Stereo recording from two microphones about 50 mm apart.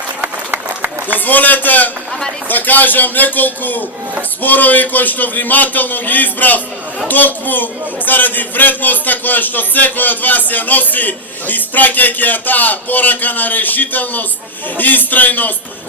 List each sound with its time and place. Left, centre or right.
0.2 s applause: right
1.2 s a man's voice: left